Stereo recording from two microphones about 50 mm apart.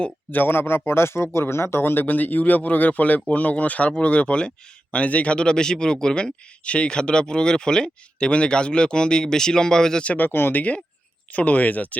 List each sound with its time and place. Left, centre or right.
0.3 s speech: left; by 10.0 s centre
10.0 s speech: left
10.2 s speech: left
11.3 s speech: left